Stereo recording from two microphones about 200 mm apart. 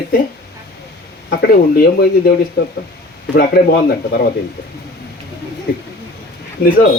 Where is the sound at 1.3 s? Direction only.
50° left (ahead or behind).